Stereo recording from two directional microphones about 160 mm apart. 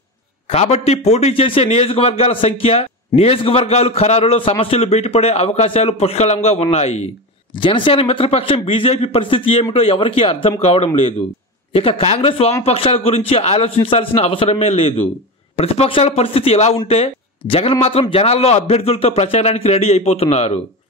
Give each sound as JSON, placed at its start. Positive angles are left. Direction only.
{"t": 0.5, "sound": "a man's voice", "side_deg": 40}
{"t": 7.5, "sound": "a man's voice", "side_deg": 30}